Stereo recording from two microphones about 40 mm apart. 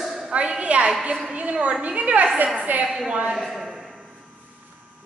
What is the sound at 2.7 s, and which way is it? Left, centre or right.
Speech, right.